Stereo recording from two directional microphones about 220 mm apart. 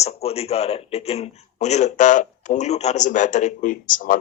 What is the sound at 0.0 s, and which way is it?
A man's voice, 30° left (ahead or behind).